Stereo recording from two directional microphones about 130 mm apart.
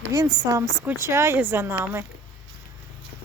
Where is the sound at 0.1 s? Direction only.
30° right (ahead or behind).